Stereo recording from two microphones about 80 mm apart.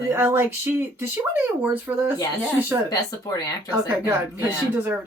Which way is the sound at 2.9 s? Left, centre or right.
Left.